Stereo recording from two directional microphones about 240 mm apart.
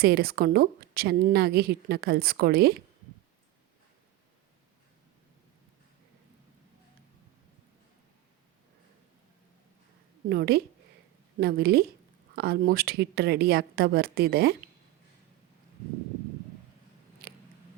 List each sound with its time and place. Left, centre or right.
0.0 s speech: right
10.2 s speech: right